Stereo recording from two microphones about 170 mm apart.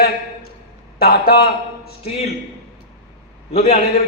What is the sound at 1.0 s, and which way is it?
Speech, 65° left (ahead or behind).